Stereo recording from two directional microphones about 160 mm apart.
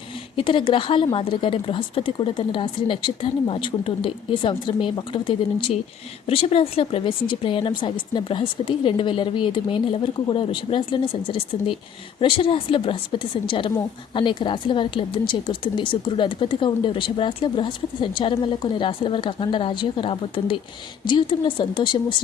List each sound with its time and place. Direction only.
0.3 s speech: 30° left (ahead or behind)